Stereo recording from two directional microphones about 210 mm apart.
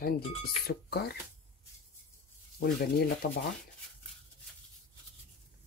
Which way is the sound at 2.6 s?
50° left (ahead or behind).